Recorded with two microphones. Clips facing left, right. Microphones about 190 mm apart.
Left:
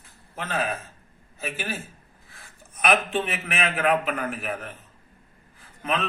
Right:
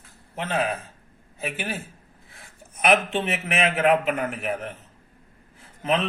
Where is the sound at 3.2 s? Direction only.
25° right (ahead or behind).